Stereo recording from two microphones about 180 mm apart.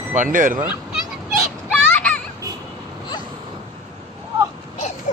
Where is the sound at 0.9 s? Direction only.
Centre (ahead or behind).